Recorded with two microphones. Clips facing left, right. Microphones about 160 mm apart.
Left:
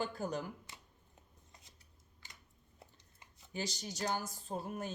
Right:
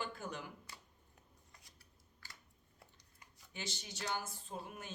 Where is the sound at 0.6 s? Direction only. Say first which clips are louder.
Even; 20° left (ahead or behind).